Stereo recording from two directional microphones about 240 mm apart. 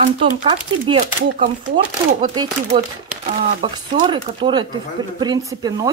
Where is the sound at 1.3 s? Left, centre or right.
Centre.